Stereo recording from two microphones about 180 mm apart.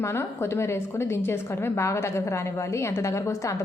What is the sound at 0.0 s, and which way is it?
A woman's voice, 15° left (ahead or behind).